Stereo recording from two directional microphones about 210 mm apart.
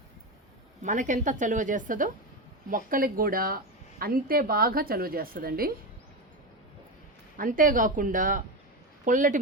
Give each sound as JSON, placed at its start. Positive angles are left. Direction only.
{"t": 0.8, "sound": "a woman's voice", "side_deg": -35}
{"t": 7.3, "sound": "a woman's voice", "side_deg": -40}